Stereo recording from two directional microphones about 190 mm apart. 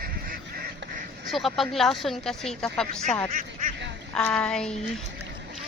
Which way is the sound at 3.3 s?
45° right (ahead or behind).